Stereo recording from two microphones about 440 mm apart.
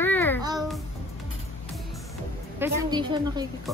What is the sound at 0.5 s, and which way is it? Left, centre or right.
Music, centre.